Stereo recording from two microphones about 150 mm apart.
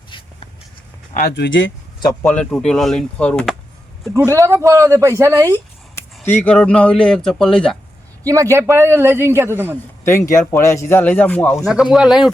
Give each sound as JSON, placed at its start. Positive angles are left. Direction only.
{"t": 1.1, "sound": "speech", "side_deg": 90}
{"t": 2.2, "sound": "a man's voice", "side_deg": 10}
{"t": 4.3, "sound": "speech", "side_deg": -20}
{"t": 6.2, "sound": "a man's voice", "side_deg": 10}
{"t": 8.3, "sound": "a man's voice", "side_deg": -20}
{"t": 10.0, "sound": "speech", "side_deg": 15}
{"t": 11.6, "sound": "a man's voice", "side_deg": -5}